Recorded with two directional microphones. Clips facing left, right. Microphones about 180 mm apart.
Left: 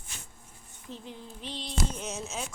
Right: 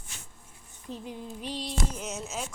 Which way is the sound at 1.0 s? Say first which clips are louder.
Right 7 dB; 10° right (ahead or behind).